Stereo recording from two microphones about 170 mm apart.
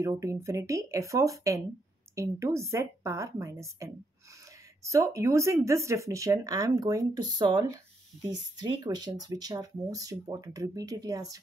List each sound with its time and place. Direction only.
0.0 s a woman's voice: 20° right (ahead or behind)